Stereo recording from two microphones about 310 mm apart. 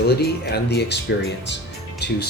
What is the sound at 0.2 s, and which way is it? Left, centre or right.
Speech, left.